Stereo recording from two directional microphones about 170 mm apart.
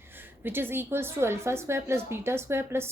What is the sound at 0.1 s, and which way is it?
A woman's voice, 10° right (ahead or behind).